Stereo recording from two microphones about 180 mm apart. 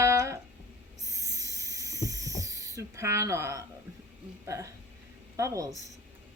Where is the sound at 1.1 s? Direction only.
20° right (ahead or behind).